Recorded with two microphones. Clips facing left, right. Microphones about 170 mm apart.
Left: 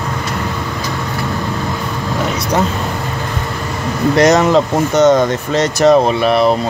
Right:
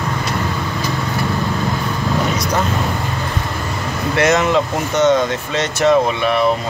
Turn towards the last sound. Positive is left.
turn(degrees=35)  # may be behind; listen again after turning